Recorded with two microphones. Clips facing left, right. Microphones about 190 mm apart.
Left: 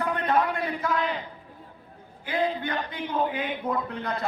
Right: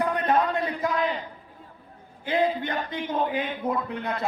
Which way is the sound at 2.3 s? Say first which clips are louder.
Right 3 dB; 20° right (ahead or behind).